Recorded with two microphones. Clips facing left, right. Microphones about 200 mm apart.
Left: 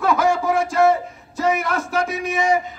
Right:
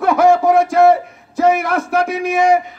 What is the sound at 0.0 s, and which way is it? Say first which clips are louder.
Speech: right 7 dB; 60° right (ahead or behind).